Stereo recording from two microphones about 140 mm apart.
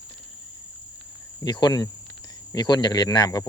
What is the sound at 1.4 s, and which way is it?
Speech, 30° left (ahead or behind).